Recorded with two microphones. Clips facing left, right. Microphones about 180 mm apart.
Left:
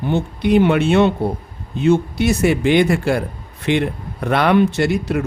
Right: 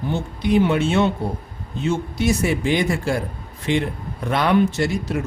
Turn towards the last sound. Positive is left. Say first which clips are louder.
# left 4 dB
turn(degrees=65)  # may be behind; listen again after turning